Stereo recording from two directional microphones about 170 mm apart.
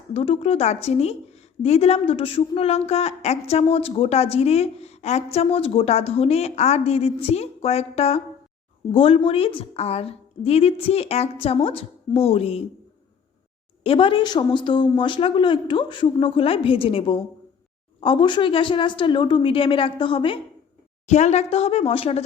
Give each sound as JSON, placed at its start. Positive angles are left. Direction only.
{"t": 0.1, "sound": "a woman's voice", "side_deg": 35}
{"t": 13.8, "sound": "a woman's voice", "side_deg": 30}
{"t": 21.1, "sound": "a woman's voice", "side_deg": 40}